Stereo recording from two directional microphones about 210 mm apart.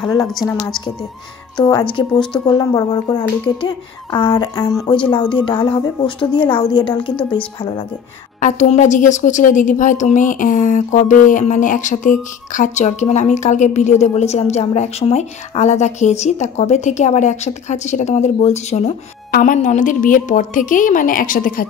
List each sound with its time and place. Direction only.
0.0 s speech: 20° left (ahead or behind)
0.3 s a woman's voice: centre (ahead or behind)
1.6 s speech: 20° left (ahead or behind)
8.4 s speech: 35° left (ahead or behind)